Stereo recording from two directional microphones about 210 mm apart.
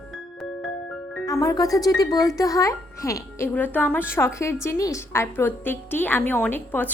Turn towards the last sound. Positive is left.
turn(degrees=10)  # may be behind; listen again after turning